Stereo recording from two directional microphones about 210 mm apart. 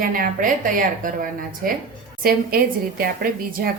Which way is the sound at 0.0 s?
40° right (ahead or behind).